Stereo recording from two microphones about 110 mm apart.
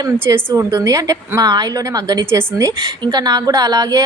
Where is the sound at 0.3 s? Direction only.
25° right (ahead or behind).